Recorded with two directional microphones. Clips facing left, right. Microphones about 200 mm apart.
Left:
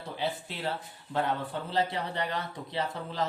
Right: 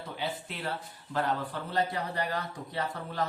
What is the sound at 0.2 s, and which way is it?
Music, 25° left (ahead or behind).